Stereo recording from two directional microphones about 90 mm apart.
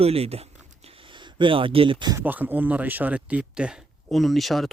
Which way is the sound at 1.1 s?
60° right (ahead or behind).